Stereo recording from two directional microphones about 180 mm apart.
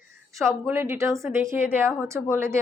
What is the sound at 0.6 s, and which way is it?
A woman's voice, 15° right (ahead or behind).